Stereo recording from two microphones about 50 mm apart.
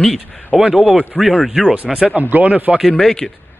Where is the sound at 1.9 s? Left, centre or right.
Right.